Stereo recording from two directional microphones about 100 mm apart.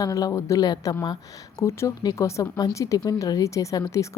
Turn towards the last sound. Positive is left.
turn(degrees=30)  # may be behind; listen again after turning